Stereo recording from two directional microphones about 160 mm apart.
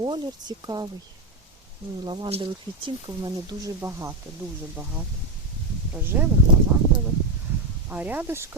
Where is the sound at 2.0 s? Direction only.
30° right (ahead or behind).